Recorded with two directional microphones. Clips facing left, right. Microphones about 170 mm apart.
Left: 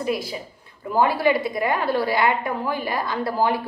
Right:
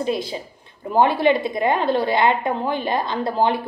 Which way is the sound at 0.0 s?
25° right (ahead or behind).